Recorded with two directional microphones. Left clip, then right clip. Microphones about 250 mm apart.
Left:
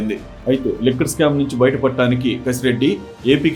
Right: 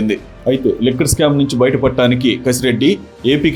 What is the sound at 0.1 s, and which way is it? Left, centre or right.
Speech, right.